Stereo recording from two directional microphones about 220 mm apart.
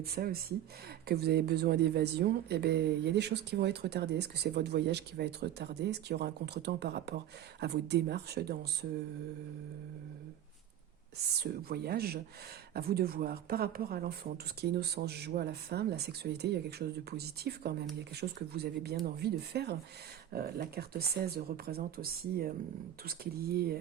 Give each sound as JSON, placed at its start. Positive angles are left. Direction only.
{"t": 0.0, "sound": "speech", "side_deg": -45}
{"t": 11.3, "sound": "speech", "side_deg": -45}